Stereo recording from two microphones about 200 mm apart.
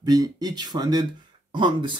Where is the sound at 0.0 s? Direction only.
20° right (ahead or behind).